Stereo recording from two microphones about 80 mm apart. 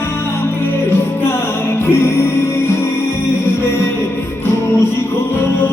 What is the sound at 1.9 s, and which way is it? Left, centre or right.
Music, left.